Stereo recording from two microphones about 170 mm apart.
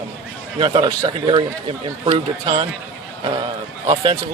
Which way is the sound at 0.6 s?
30° right (ahead or behind).